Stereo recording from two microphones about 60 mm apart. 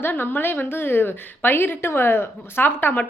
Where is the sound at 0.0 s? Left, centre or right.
Left.